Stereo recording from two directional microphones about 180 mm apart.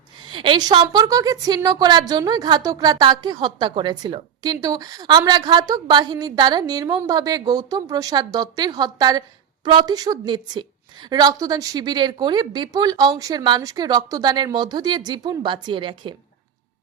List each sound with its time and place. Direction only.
0.2 s a woman's voice: 25° right (ahead or behind)